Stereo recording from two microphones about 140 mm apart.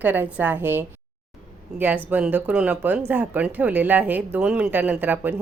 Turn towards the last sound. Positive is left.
turn(degrees=-15)  # may be behind; listen again after turning